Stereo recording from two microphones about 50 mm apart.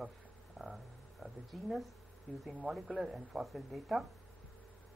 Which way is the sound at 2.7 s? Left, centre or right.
Centre.